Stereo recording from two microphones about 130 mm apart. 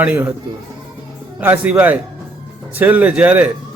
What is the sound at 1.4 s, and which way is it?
Speech, 15° right (ahead or behind).